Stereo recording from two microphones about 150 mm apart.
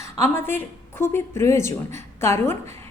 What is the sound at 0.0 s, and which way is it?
A woman's voice, 15° left (ahead or behind).